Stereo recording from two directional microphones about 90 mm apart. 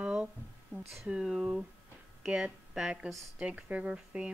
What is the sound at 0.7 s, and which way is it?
Speech, 10° right (ahead or behind).